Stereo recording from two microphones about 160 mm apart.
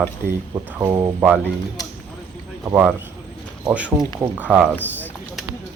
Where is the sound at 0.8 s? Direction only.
20° right (ahead or behind).